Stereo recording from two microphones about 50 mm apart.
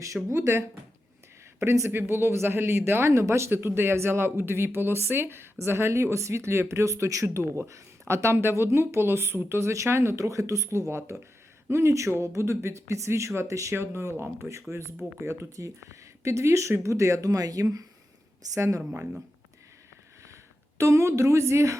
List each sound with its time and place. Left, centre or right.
0.1 s speech: centre
1.5 s speech: right
1.9 s speech: right
3.5 s speech: right
7.7 s speech: right
11.7 s speech: right
13.5 s speech: right
13.7 s speech: right
20.7 s speech: right